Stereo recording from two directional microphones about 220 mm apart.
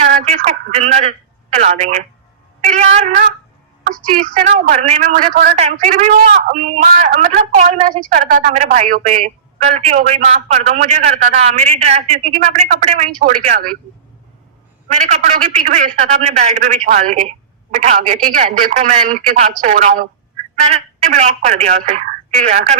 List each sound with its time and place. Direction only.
0.0 s a man's voice: 30° right (ahead or behind)
2.6 s a sound: 30° right (ahead or behind)
4.0 s a man's voice: 35° right (ahead or behind)
14.8 s a man's voice: 30° right (ahead or behind)